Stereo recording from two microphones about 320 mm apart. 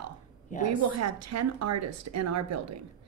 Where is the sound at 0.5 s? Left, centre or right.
Left.